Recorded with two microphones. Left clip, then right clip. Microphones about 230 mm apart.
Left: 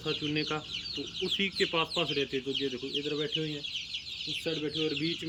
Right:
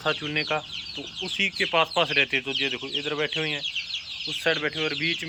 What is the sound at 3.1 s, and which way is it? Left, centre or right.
Speech, right.